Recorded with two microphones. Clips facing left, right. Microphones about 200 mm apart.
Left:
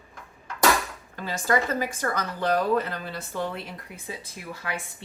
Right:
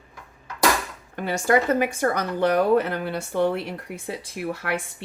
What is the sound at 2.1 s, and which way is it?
Speech, 55° right (ahead or behind).